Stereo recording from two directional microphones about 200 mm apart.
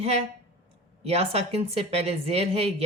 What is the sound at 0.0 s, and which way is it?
Speech, 30° right (ahead or behind).